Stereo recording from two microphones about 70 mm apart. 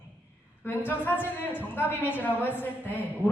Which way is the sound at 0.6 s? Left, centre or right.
Left.